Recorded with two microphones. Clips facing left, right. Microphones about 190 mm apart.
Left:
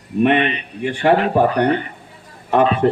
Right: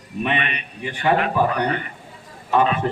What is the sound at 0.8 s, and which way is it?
A man's voice, 55° left (ahead or behind).